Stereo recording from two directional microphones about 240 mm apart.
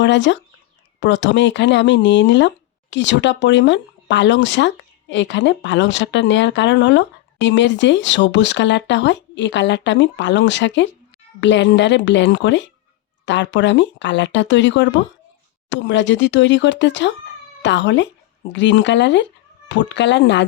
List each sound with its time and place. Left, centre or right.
0.0 s speech: left